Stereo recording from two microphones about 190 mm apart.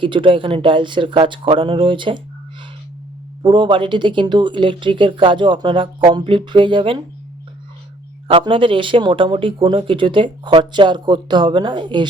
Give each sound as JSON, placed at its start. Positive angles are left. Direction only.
{"t": 0.0, "sound": "speech", "side_deg": -25}
{"t": 3.4, "sound": "speech", "side_deg": -25}
{"t": 8.3, "sound": "speech", "side_deg": -25}